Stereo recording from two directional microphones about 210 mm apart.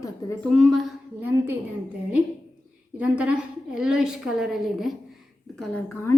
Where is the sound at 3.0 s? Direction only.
5° right (ahead or behind).